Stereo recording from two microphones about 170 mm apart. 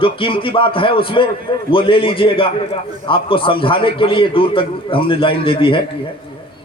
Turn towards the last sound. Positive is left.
turn(degrees=30)  # may be behind; listen again after turning